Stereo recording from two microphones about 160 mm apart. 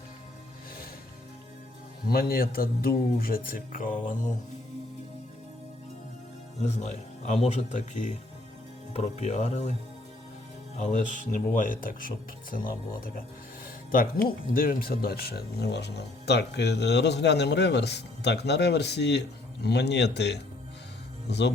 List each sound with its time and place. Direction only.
2.0 s speech: 70° left (ahead or behind)
6.7 s speech: 45° left (ahead or behind)
10.8 s speech: 50° left (ahead or behind); by 21.5 s 90° left